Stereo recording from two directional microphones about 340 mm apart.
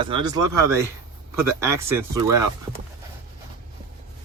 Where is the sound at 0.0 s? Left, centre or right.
Centre.